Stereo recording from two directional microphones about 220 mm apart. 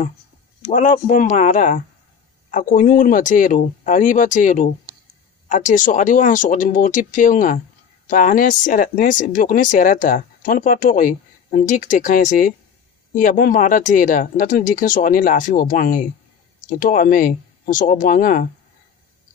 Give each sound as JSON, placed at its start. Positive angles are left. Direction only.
{"t": 0.7, "sound": "speech", "side_deg": 35}